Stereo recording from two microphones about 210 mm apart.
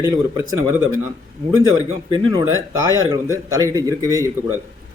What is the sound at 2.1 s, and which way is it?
Speech, 15° right (ahead or behind).